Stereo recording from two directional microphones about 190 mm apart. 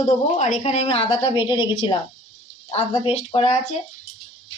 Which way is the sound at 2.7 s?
35° left (ahead or behind).